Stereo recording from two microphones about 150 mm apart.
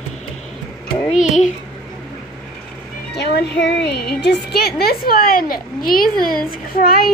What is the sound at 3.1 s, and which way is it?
Speech, 90° left.